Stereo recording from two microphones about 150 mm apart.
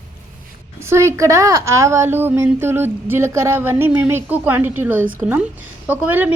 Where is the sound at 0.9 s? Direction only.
20° right (ahead or behind).